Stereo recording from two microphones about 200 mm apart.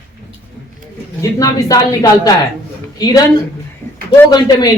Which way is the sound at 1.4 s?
20° left (ahead or behind).